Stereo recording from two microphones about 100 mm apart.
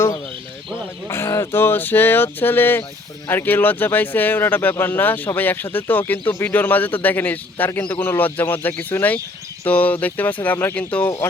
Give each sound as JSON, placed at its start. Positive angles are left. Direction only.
{"t": 1.0, "sound": "speech", "side_deg": 30}